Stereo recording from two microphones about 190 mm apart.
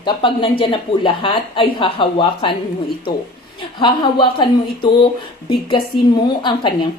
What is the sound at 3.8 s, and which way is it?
Speech, 25° left (ahead or behind).